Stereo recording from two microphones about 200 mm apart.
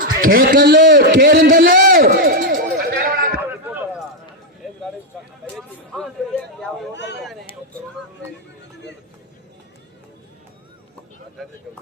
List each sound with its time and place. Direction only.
0.2 s a sound: 45° right (ahead or behind)
5.5 s speech: centre (ahead or behind)
6.9 s speech: 60° left (ahead or behind)